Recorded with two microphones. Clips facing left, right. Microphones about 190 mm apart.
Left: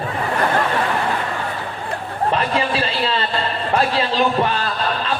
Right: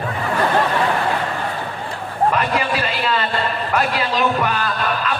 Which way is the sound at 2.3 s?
30° left (ahead or behind).